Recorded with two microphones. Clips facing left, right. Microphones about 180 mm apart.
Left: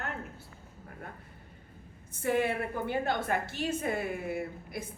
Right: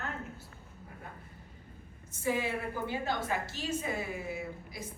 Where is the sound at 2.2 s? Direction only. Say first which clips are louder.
Left 3 dB; 60° left (ahead or behind).